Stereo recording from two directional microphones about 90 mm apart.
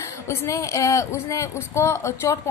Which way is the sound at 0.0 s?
35° left (ahead or behind).